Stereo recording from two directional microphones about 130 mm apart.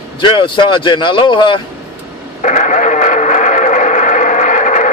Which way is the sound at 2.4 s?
70° left (ahead or behind).